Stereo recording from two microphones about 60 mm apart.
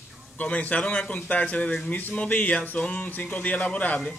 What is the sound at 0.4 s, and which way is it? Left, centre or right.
Speech, left.